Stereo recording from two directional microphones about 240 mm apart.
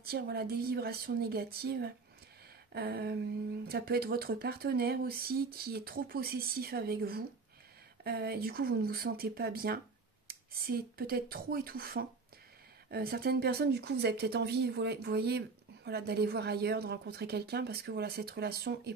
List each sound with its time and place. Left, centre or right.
0.0 s speech: right